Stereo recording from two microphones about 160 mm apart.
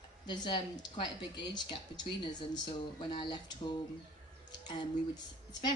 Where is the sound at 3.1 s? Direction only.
30° left (ahead or behind).